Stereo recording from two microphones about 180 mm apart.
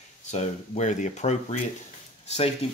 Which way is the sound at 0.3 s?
40° left (ahead or behind).